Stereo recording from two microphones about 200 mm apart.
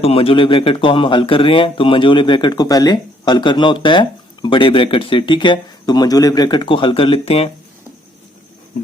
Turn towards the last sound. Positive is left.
turn(degrees=30)  # may be behind; listen again after turning